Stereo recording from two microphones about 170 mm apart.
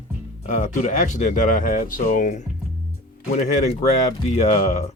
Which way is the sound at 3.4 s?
40° left (ahead or behind).